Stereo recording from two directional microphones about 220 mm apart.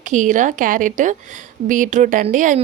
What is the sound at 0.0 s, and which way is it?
Speech, 35° right (ahead or behind).